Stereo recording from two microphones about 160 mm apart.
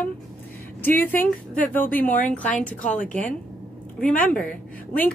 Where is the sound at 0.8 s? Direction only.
10° left (ahead or behind).